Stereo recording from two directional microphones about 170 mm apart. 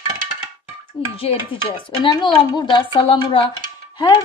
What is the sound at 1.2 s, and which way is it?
A woman's voice, 35° left (ahead or behind).